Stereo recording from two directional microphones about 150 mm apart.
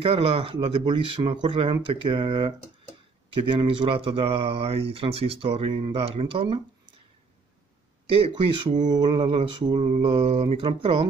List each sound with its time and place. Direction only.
0.0 s speech: 40° right (ahead or behind)
8.1 s speech: 40° right (ahead or behind)
9.0 s speech: 35° right (ahead or behind)